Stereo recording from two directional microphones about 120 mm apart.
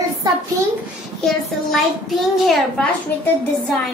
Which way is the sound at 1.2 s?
Centre (ahead or behind).